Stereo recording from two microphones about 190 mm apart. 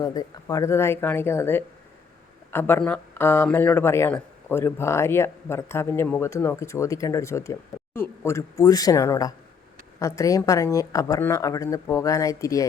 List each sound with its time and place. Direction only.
0.0 s speech: 20° left (ahead or behind)